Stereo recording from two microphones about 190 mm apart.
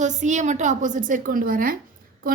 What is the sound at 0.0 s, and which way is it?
A woman's voice, 40° right (ahead or behind).